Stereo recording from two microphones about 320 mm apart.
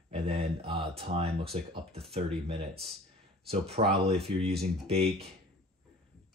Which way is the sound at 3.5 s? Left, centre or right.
Centre.